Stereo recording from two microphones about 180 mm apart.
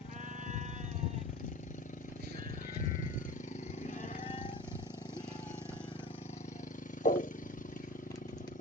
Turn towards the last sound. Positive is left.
turn(degrees=45)  # may be behind; listen again after turning